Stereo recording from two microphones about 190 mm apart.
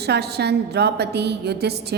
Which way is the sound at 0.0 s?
60° right (ahead or behind).